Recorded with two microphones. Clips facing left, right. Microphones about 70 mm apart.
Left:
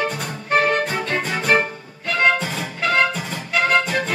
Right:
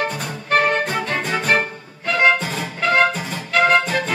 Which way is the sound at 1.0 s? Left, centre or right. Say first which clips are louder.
Even; centre.